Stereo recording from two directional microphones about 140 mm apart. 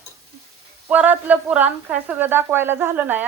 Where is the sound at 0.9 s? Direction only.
10° right (ahead or behind).